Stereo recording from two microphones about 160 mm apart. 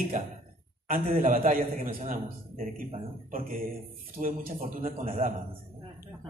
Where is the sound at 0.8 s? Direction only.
60° right (ahead or behind).